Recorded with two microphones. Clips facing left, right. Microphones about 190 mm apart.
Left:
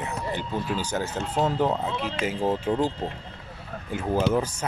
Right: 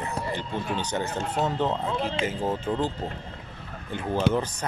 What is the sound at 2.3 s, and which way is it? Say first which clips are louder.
Speech: left 3 dB; 10° left (ahead or behind).